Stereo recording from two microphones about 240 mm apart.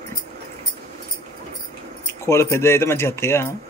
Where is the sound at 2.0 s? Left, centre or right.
Centre.